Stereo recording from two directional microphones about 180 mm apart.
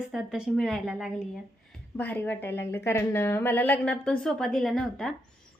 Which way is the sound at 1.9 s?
10° left (ahead or behind).